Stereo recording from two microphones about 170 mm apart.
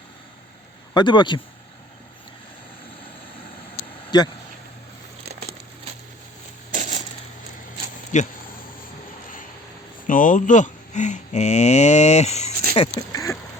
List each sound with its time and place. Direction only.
0.9 s a man's voice: 25° left (ahead or behind)
4.1 s a man's voice: 25° left (ahead or behind)
6.7 s coin: 45° right (ahead or behind)
8.1 s speech: 45° left (ahead or behind)
10.1 s speech: 50° left (ahead or behind); by 12.9 s 30° left (ahead or behind)